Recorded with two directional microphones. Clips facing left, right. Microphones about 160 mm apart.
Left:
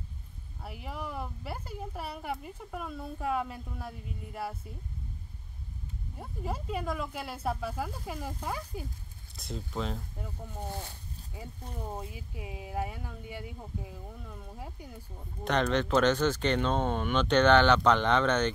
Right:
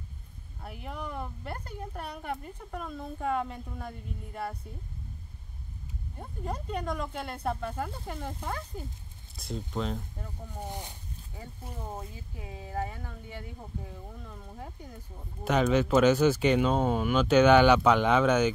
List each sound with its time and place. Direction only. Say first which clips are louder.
0.6 s speech: even; centre (ahead or behind)
6.1 s speech: right 1 dB; 5° left (ahead or behind)
10.6 s speech: even; 15° right (ahead or behind)
11.9 s speech: left 1 dB; 10° left (ahead or behind)
15.4 s speech: right 3 dB; 5° right (ahead or behind)